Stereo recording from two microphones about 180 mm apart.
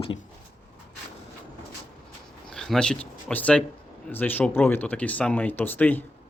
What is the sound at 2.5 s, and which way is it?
Speech, 5° left (ahead or behind).